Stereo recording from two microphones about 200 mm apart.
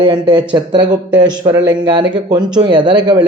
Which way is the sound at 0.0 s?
20° right (ahead or behind).